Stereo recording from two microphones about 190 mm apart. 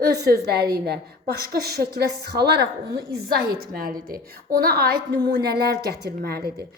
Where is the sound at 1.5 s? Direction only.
55° right (ahead or behind).